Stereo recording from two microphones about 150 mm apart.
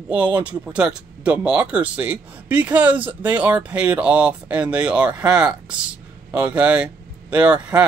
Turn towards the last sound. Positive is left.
turn(degrees=-10)  # may be behind; listen again after turning